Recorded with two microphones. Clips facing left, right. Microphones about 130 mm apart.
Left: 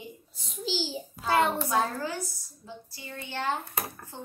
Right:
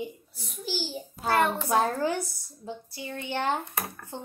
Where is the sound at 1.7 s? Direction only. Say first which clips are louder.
Right 4 dB; 60° right (ahead or behind).